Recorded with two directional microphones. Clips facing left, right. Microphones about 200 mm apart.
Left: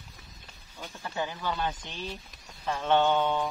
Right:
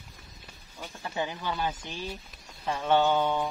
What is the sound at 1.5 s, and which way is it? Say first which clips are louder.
Speech: even; 10° right (ahead or behind).